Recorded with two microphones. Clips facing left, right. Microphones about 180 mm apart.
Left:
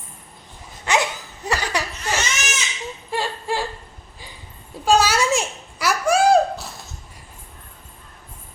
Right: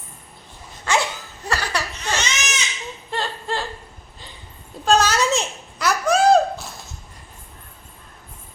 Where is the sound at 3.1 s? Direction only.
10° left (ahead or behind).